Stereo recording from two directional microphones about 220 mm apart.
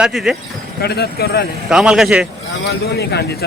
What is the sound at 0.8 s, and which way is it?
Speech, 45° left (ahead or behind).